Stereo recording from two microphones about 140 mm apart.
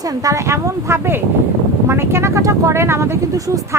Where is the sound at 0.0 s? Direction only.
25° right (ahead or behind).